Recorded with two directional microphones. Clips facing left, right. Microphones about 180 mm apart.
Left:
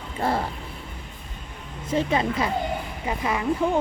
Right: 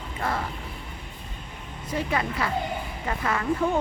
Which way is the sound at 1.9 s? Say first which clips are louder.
Left 5 dB; 20° left (ahead or behind).